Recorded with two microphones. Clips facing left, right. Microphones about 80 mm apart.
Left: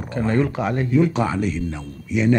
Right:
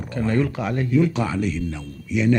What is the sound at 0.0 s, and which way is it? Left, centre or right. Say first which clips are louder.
A man's voice: left 1 dB; left.